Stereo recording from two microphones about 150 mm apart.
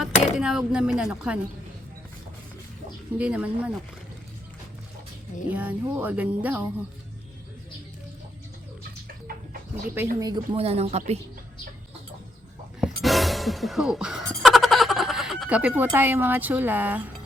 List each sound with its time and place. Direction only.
0.0 s speech: 5° right (ahead or behind)
3.2 s speech: 10° right (ahead or behind)
5.5 s speech: 10° right (ahead or behind)
10.2 s speech: 25° right (ahead or behind)
10.6 s speech: 45° right (ahead or behind)
12.8 s music: centre (ahead or behind)
14.3 s a sound: centre (ahead or behind)